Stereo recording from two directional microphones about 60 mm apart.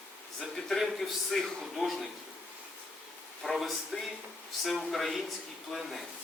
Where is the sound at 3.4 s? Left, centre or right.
Centre.